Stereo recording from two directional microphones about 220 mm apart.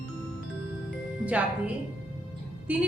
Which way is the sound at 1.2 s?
5° right (ahead or behind).